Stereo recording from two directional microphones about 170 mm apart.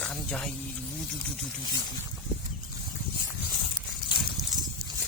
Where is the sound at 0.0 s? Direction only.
5° left (ahead or behind).